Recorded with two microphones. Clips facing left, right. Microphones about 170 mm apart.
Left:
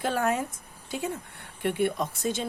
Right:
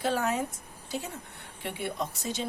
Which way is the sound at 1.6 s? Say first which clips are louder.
Left 7 dB; 55° left (ahead or behind).